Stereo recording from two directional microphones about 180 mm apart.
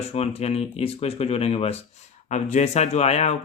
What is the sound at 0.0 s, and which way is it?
Speech, 35° left (ahead or behind).